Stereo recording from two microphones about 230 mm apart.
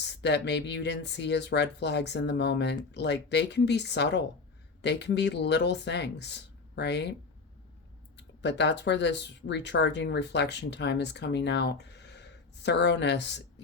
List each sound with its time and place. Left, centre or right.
0.0 s speech: left